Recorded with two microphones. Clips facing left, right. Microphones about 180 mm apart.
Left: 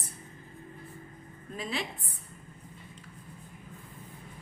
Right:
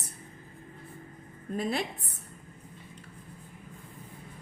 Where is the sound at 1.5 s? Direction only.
50° right (ahead or behind).